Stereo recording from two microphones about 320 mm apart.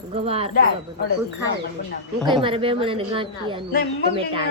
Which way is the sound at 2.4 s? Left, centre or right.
Centre.